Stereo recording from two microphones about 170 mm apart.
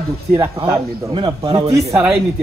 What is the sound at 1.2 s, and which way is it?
Speech, 30° right (ahead or behind).